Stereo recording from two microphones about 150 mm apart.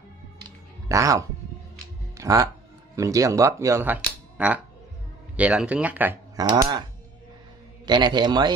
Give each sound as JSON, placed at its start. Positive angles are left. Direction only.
{"t": 0.8, "sound": "speech", "side_deg": -20}
{"t": 6.3, "sound": "speech", "side_deg": -25}